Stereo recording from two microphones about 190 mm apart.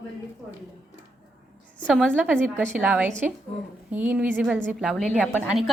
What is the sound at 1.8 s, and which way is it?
A woman's voice, centre (ahead or behind).